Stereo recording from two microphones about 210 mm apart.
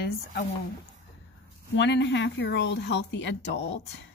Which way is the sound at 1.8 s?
55° left (ahead or behind).